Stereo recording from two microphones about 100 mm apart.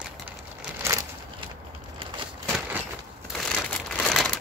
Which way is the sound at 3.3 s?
5° left (ahead or behind).